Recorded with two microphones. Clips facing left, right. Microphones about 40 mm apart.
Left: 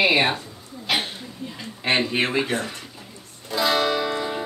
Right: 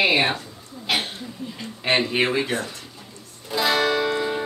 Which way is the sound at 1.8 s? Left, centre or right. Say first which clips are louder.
Right 1 dB; centre.